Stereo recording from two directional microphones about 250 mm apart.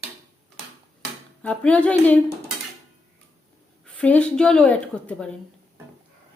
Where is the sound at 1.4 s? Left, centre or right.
Centre.